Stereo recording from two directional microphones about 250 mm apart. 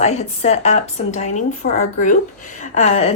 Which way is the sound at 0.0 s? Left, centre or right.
Left.